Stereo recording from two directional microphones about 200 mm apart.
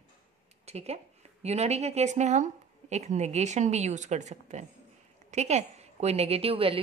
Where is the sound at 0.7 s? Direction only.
30° right (ahead or behind).